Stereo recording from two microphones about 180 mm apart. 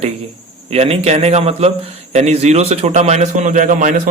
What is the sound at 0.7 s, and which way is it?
A man's voice, 35° right (ahead or behind).